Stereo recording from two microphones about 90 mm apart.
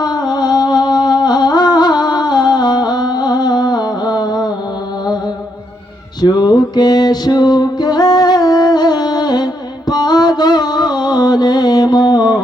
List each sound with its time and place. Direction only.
0.0 s music: 50° left (ahead or behind)
6.2 s music: 50° left (ahead or behind)